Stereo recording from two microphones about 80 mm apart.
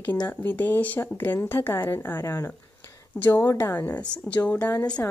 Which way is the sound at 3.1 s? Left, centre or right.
Left.